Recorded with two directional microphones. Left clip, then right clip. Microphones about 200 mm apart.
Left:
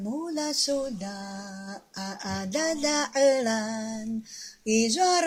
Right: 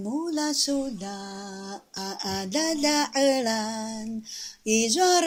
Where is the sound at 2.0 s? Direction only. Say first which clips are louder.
Right 3 dB; 35° right (ahead or behind).